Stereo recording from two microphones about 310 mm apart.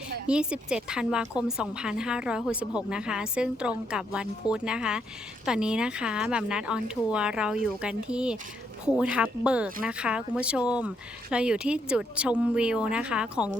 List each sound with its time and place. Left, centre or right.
0.3 s a woman's voice: centre